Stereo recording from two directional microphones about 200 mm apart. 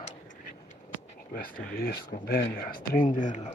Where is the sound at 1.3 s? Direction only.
50° left (ahead or behind).